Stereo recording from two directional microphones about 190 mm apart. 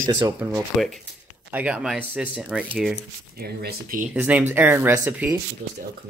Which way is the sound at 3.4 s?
55° right (ahead or behind).